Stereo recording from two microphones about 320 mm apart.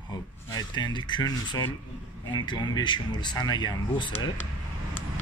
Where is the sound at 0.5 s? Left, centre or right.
Centre.